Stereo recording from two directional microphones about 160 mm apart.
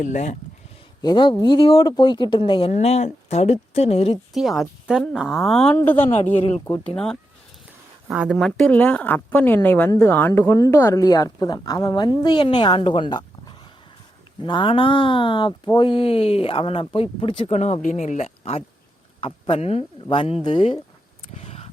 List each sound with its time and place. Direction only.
0.0 s speech: 50° left (ahead or behind)
1.0 s speech: 30° left (ahead or behind)
4.4 s speech: centre (ahead or behind)
6.3 s speech: 40° left (ahead or behind)
6.7 s speech: 10° left (ahead or behind); by 20.7 s 35° left (ahead or behind)
21.3 s a sound: 40° left (ahead or behind)